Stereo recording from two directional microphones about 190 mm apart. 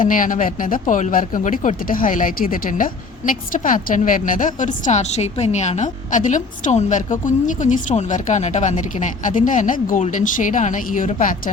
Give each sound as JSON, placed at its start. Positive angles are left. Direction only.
{"t": 0.0, "sound": "speech", "side_deg": 45}